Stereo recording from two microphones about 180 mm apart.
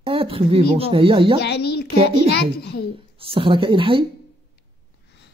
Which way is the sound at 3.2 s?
30° right (ahead or behind).